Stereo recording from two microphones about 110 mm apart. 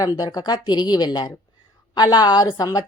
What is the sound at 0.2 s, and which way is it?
Speech, 40° left (ahead or behind).